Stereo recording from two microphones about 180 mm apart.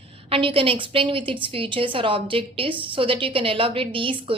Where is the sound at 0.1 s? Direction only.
30° right (ahead or behind).